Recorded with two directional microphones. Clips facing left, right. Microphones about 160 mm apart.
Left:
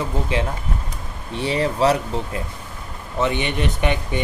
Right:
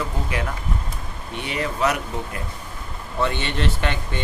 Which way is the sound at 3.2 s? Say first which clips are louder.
Left 2 dB; 15° left (ahead or behind).